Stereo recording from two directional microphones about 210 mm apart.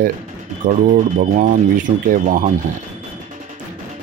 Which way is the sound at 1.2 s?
35° right (ahead or behind).